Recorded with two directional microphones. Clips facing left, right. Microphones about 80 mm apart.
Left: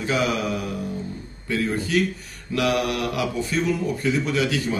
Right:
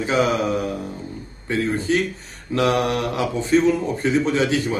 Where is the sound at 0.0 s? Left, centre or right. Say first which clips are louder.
Right 4 dB; right.